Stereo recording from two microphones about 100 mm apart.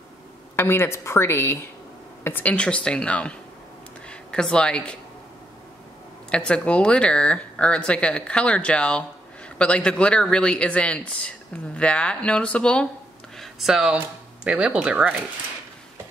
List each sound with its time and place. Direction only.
0.6 s a woman's voice: 25° left (ahead or behind)
6.3 s speech: 10° left (ahead or behind)
13.4 s a sound: 5° right (ahead or behind)
13.9 s speech: 10° right (ahead or behind)